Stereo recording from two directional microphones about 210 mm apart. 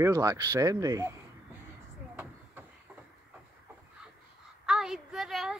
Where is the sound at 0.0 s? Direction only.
15° right (ahead or behind).